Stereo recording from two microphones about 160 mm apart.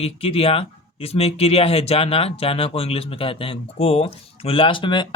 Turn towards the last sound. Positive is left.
turn(degrees=30)  # may be behind; listen again after turning